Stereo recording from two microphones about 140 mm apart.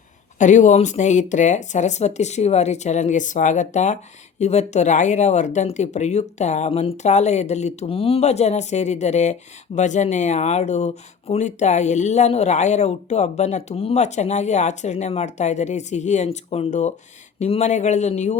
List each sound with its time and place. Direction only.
0.3 s speech: 60° left (ahead or behind)